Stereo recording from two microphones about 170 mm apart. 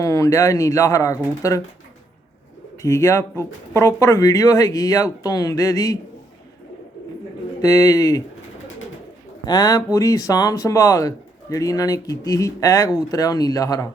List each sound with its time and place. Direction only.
0.0 s speech: 20° left (ahead or behind)
2.8 s speech: 15° left (ahead or behind)
7.6 s speech: 20° left (ahead or behind)
9.5 s speech: 20° left (ahead or behind)